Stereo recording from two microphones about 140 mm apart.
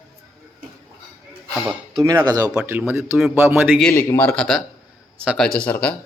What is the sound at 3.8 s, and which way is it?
Speech, 10° left (ahead or behind).